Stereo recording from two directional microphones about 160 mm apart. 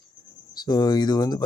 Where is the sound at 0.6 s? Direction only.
25° left (ahead or behind).